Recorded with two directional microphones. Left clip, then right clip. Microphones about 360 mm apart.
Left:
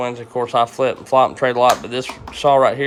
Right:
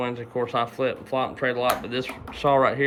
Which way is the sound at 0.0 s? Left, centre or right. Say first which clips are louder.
Left 5 dB; centre.